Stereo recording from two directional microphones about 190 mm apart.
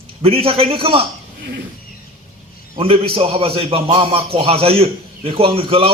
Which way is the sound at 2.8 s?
30° right (ahead or behind).